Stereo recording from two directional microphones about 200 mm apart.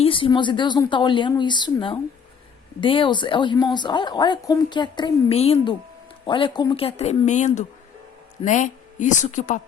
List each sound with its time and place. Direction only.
0.0 s a woman's voice: 25° left (ahead or behind)